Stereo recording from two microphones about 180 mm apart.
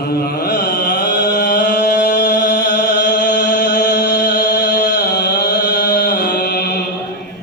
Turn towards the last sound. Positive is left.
turn(degrees=60)  # may be behind; listen again after turning